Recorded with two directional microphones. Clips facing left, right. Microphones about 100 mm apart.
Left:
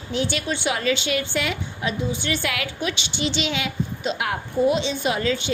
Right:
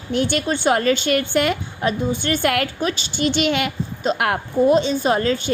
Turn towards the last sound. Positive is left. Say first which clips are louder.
# right 4 dB
turn(degrees=-45)  # may be behind; listen again after turning